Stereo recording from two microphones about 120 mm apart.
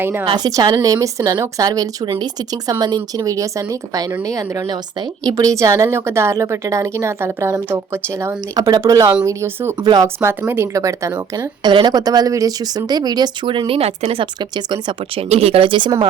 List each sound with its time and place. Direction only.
0.0 s a woman's voice: 15° right (ahead or behind)
0.3 s a woman's voice: 35° right (ahead or behind)
9.8 s speech: 30° right (ahead or behind)
10.2 s a woman's voice: 20° right (ahead or behind)
11.3 s speech: 40° right (ahead or behind)
15.3 s speech: 55° right (ahead or behind)